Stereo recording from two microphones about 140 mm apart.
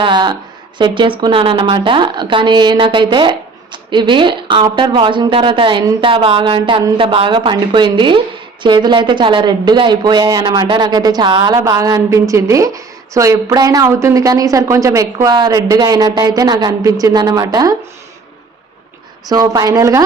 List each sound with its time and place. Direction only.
0.0 s a woman's voice: 35° right (ahead or behind)
19.3 s a woman's voice: 25° right (ahead or behind)